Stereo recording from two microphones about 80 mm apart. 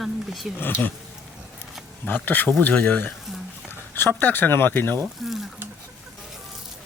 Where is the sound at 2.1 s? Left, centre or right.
Left.